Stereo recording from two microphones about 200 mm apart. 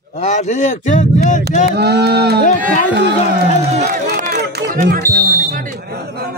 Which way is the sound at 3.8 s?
45° right (ahead or behind).